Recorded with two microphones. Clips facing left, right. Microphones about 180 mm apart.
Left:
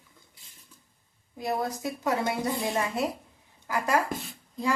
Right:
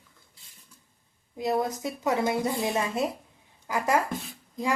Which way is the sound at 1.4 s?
20° right (ahead or behind).